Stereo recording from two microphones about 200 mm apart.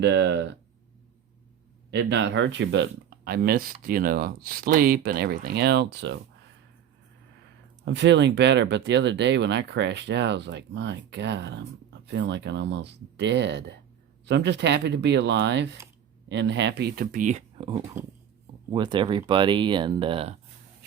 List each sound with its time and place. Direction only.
0.0 s speech: 60° right (ahead or behind)
1.9 s speech: 65° right (ahead or behind)
7.9 s speech: 60° right (ahead or behind); by 17.4 s 40° right (ahead or behind)
17.6 s speech: 25° right (ahead or behind)